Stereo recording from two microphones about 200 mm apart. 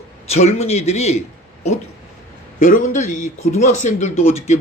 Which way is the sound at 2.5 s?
40° left (ahead or behind).